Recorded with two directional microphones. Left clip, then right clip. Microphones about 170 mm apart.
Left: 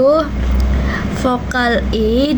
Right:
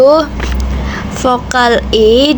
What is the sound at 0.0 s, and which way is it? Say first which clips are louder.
A woman's voice: right 5 dB; 25° right (ahead or behind).